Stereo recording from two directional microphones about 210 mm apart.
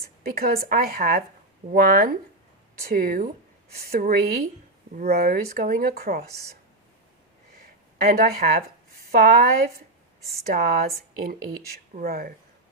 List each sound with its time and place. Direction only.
0.2 s speech: 45° right (ahead or behind)
8.0 s speech: 45° right (ahead or behind)